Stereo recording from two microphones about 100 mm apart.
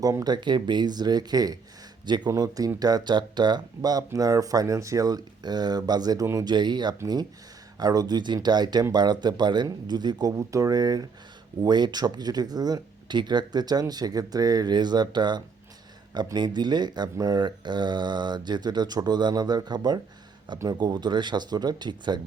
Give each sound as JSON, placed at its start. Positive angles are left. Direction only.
{"t": 0.0, "sound": "speech", "side_deg": -30}
{"t": 0.3, "sound": "speech", "side_deg": -50}
{"t": 10.3, "sound": "speech", "side_deg": -30}